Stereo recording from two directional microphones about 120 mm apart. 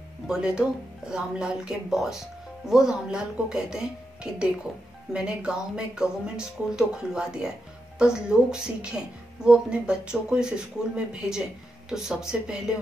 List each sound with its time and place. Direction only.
0.3 s speech: 5° right (ahead or behind)